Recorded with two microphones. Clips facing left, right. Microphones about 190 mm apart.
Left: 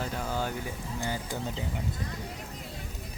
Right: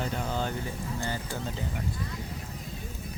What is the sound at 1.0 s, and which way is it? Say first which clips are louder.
Speech: left 3 dB; 15° left (ahead or behind).